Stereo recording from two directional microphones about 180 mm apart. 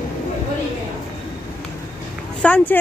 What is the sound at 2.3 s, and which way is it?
Speech, 5° left (ahead or behind).